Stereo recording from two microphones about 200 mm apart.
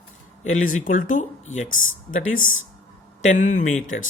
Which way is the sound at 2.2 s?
80° left.